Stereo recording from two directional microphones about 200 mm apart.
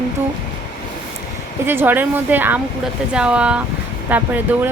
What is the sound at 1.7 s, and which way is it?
A woman's voice, 10° right (ahead or behind).